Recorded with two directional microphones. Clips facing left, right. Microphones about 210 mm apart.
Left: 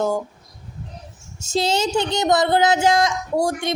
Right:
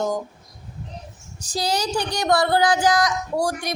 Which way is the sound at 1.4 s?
25° left (ahead or behind).